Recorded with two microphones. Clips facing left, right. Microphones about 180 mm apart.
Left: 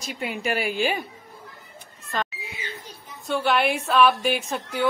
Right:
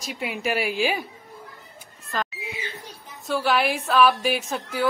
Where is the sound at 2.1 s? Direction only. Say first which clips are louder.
Even; centre (ahead or behind).